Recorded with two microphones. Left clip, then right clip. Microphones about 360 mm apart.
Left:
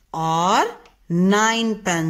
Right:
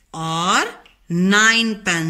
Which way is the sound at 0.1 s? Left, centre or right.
Left.